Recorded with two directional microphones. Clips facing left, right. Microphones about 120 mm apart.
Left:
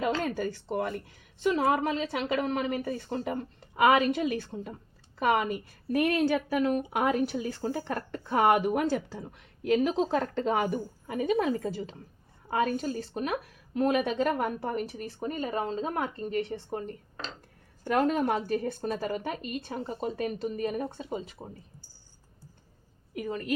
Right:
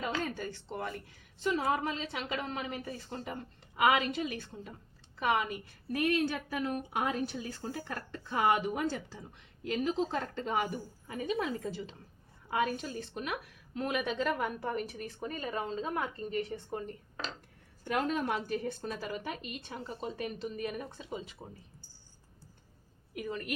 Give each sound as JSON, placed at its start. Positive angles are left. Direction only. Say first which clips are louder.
{"t": 0.2, "sound": "a woman's voice", "louder": "left 6 dB", "side_deg": 60}
{"t": 2.7, "sound": "a woman's voice", "louder": "left 8 dB", "side_deg": 45}
{"t": 17.8, "sound": "speech", "louder": "left 6 dB", "side_deg": 45}
{"t": 20.1, "sound": "speech", "louder": "left 6 dB", "side_deg": 45}
{"t": 23.1, "sound": "speech", "louder": "left 6 dB", "side_deg": 40}